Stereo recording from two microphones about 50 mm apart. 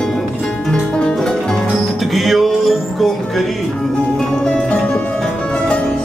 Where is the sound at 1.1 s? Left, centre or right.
Centre.